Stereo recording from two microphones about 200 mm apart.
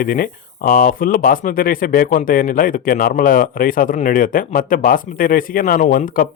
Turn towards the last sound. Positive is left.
turn(degrees=45)  # may be behind; listen again after turning